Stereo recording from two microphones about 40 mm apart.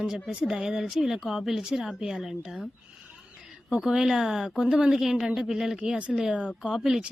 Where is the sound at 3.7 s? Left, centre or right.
Centre.